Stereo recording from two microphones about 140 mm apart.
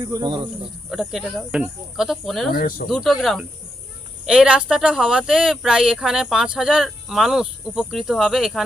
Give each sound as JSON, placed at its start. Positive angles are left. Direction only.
{"t": 0.9, "sound": "speech", "side_deg": 0}
{"t": 2.5, "sound": "speech", "side_deg": 90}
{"t": 2.9, "sound": "speech", "side_deg": 0}